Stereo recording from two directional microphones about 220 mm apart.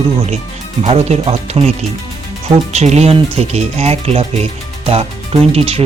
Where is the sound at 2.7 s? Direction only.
30° right (ahead or behind).